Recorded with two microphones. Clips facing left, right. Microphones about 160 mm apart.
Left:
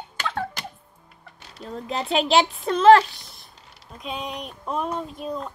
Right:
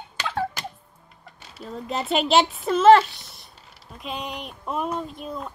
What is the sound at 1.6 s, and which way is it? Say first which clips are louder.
Speech: even; centre (ahead or behind).